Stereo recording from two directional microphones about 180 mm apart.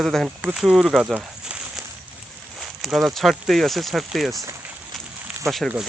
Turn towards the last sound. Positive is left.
turn(degrees=0)  # may be behind; listen again after turning